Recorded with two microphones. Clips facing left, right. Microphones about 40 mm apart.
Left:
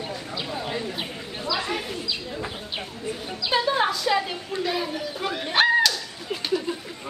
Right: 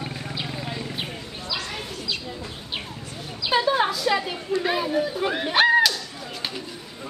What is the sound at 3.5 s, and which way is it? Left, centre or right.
A woman's voice, centre.